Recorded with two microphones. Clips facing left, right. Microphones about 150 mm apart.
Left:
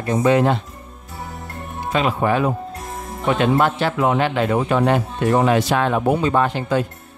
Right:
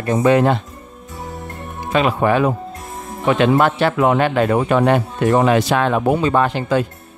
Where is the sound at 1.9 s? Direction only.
65° right (ahead or behind).